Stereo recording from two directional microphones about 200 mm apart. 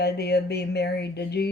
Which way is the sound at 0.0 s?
55° left (ahead or behind).